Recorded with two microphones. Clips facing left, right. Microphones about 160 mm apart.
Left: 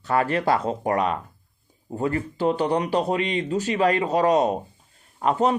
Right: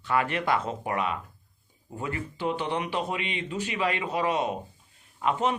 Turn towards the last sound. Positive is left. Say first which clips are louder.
# left 5 dB
turn(degrees=40)  # may be behind; listen again after turning